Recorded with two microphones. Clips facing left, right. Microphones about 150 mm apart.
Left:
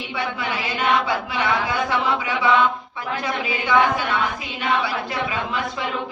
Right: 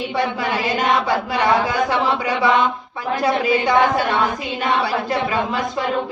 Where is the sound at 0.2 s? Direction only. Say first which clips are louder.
Right 5 dB; 40° right (ahead or behind).